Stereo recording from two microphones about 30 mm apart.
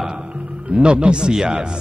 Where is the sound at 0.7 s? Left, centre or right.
Right.